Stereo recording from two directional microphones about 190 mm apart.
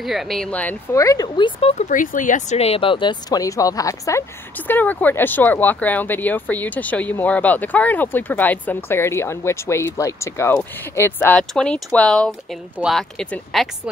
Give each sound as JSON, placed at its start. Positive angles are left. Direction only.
{"t": 0.0, "sound": "speech", "side_deg": 0}
{"t": 1.9, "sound": "speech", "side_deg": 45}